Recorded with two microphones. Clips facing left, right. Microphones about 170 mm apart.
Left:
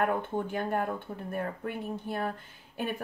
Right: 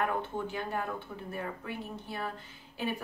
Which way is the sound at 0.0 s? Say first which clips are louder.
Left 3 dB; 50° left (ahead or behind).